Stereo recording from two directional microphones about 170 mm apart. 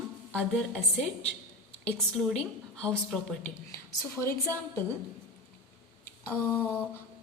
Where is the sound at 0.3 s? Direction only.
Centre (ahead or behind).